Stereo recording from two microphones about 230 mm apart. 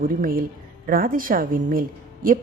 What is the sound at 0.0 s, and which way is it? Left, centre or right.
A woman's voice, right.